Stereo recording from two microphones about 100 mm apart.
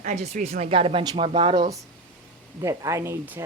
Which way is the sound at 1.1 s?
60° right (ahead or behind).